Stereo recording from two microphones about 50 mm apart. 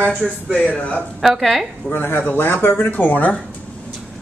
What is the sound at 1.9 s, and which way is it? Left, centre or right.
Speech, left.